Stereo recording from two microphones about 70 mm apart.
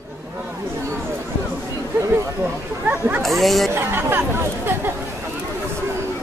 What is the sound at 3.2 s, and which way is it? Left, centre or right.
Speech, centre.